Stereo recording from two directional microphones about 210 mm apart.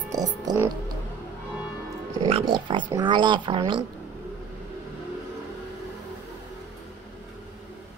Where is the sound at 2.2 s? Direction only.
25° right (ahead or behind).